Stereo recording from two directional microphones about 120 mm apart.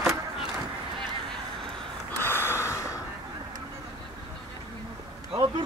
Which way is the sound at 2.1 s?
20° left (ahead or behind).